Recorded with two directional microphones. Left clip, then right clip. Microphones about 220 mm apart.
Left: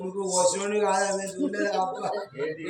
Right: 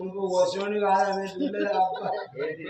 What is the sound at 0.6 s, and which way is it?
A man's voice, 20° left (ahead or behind).